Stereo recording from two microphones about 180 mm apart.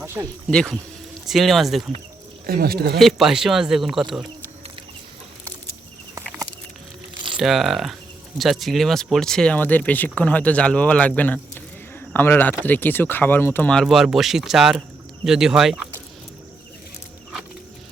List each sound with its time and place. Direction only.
0.0 s a sound: 15° right (ahead or behind)
0.5 s speech: 5° left (ahead or behind)
2.5 s speech: 55° right (ahead or behind)
3.0 s speech: centre (ahead or behind)
7.3 s speech: centre (ahead or behind)